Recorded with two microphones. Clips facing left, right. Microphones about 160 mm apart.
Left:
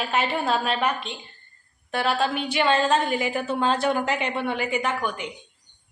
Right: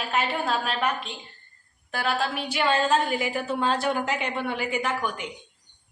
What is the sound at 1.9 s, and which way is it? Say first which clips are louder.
A woman's voice: left 3 dB; centre (ahead or behind).